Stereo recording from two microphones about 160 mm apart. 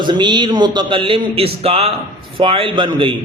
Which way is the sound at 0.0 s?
30° right (ahead or behind).